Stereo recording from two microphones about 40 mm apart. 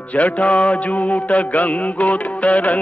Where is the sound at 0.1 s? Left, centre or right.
Left.